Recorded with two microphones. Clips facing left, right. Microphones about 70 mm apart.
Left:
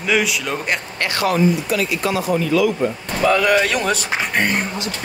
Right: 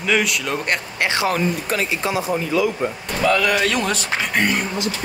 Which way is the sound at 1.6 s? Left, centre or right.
Right.